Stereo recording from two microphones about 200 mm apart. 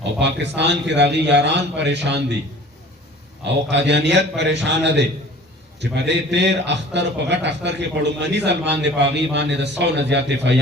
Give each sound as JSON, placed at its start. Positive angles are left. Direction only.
{"t": 0.2, "sound": "a man's voice", "side_deg": -60}
{"t": 3.7, "sound": "a man's voice", "side_deg": -60}